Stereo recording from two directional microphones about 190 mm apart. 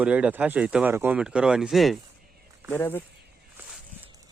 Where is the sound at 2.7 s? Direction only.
10° left (ahead or behind).